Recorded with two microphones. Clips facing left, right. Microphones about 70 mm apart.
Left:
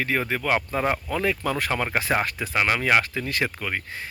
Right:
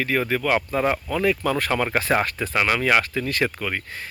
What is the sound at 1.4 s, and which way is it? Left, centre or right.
Speech, centre.